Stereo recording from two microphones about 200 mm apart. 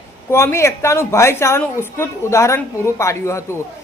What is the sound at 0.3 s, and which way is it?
A man's voice, 15° left (ahead or behind).